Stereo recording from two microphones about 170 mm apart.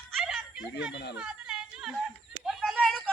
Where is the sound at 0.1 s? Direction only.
Centre (ahead or behind).